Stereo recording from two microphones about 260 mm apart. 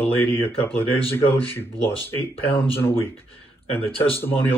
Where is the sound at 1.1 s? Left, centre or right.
Centre.